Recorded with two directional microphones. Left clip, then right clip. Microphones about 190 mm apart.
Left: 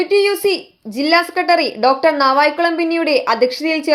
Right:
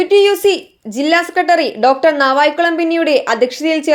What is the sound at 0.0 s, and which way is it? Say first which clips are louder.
A woman's voice: right 4 dB; 15° right (ahead or behind).